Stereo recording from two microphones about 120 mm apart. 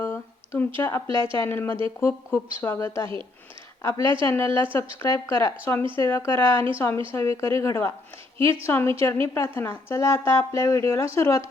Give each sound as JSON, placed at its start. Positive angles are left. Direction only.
{"t": 0.0, "sound": "a sound", "side_deg": 15}
{"t": 0.8, "sound": "a woman's voice", "side_deg": 20}
{"t": 1.0, "sound": "a woman's voice", "side_deg": -40}
{"t": 1.3, "sound": "a woman's voice", "side_deg": 20}
{"t": 4.2, "sound": "a woman's voice", "side_deg": 20}